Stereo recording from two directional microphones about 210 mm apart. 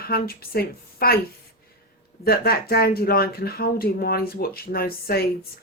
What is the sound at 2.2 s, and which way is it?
Speech, 45° left (ahead or behind).